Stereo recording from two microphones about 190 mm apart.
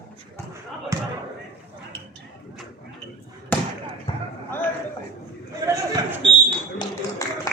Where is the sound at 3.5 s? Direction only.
5° left (ahead or behind).